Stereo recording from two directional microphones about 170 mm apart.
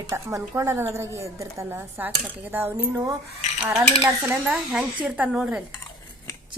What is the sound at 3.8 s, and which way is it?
Dishes, 20° right (ahead or behind).